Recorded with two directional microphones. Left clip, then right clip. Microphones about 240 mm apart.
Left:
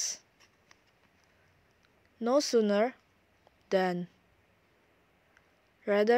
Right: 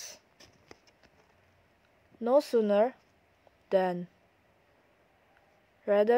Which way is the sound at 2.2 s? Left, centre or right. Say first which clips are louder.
Right 1 dB; left.